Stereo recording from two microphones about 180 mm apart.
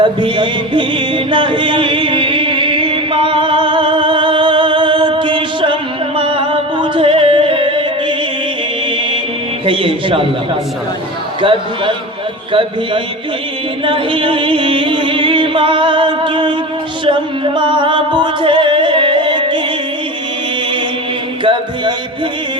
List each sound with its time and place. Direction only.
0.0 s music: 25° right (ahead or behind)
9.6 s music: 30° right (ahead or behind)
11.3 s a man's voice: 30° right (ahead or behind)
13.8 s music: 30° right (ahead or behind)
21.4 s music: 25° right (ahead or behind)